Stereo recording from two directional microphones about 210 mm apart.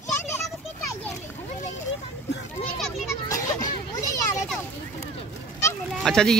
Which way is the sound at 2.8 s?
Centre (ahead or behind).